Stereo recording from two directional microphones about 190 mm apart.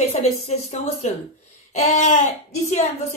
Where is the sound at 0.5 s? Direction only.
35° left (ahead or behind).